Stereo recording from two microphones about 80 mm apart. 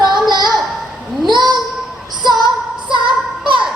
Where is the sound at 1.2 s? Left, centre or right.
Right.